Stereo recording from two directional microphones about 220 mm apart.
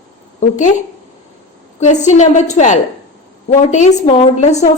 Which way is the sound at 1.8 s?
30° left (ahead or behind).